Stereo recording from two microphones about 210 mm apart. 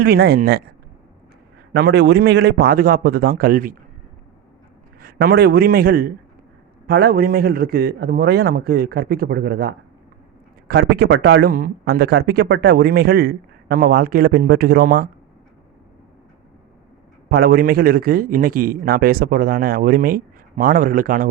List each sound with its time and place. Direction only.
0.0 s speech: 50° right (ahead or behind)
1.7 s speech: 50° right (ahead or behind)
4.9 s a man's voice: 45° right (ahead or behind)
17.2 s speech: 45° right (ahead or behind)